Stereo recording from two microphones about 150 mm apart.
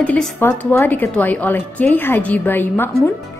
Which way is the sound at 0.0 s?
10° left (ahead or behind).